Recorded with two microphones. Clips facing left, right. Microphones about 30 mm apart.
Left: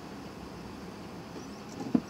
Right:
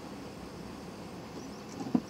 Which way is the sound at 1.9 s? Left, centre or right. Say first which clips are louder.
Left 2 dB; centre.